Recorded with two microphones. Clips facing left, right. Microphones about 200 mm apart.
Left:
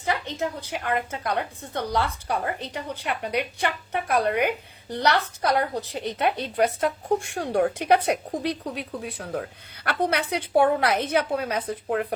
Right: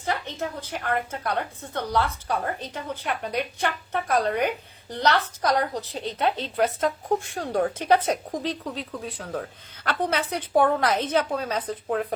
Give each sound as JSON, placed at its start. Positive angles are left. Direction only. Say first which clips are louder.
{"t": 0.0, "sound": "a woman's voice", "louder": "left 2 dB", "side_deg": 15}